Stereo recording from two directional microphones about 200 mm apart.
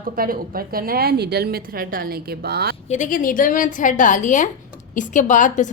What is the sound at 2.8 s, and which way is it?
A woman's voice, 40° left (ahead or behind).